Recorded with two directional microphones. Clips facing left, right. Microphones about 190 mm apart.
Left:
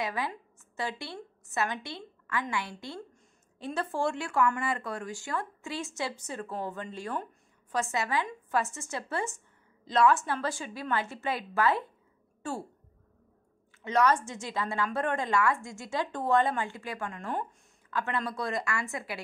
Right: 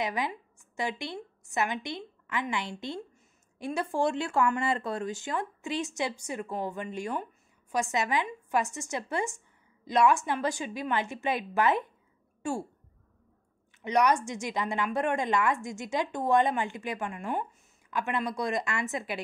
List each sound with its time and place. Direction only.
0.0 s a woman's voice: 15° right (ahead or behind)
13.8 s a woman's voice: 15° right (ahead or behind)